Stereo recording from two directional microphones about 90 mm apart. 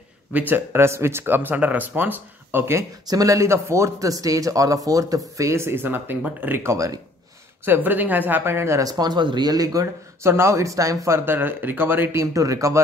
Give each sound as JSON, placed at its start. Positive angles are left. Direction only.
{"t": 0.3, "sound": "speech", "side_deg": -20}
{"t": 3.1, "sound": "speech", "side_deg": -40}
{"t": 5.4, "sound": "speech", "side_deg": -30}
{"t": 7.6, "sound": "speech", "side_deg": -20}
{"t": 8.8, "sound": "speech", "side_deg": -50}